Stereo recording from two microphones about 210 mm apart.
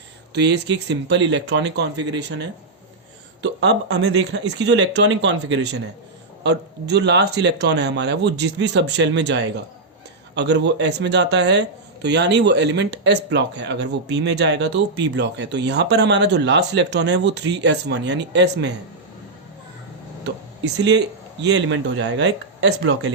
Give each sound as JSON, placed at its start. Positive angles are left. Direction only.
{"t": 0.3, "sound": "speech", "side_deg": -55}
{"t": 20.2, "sound": "speech", "side_deg": -55}